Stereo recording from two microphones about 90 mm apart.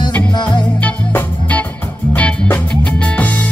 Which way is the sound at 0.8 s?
15° left (ahead or behind).